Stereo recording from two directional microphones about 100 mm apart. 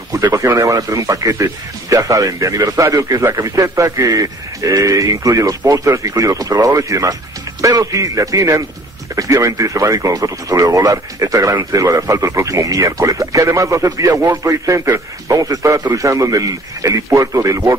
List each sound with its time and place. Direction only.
0.2 s a man's voice: 30° right (ahead or behind)